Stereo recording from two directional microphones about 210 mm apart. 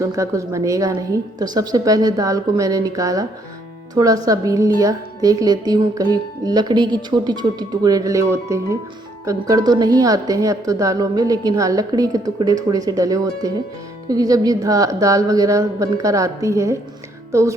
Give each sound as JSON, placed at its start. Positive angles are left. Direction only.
{"t": 0.0, "sound": "a woman's voice", "side_deg": -15}